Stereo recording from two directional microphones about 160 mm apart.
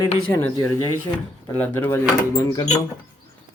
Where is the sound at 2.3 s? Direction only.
25° left (ahead or behind).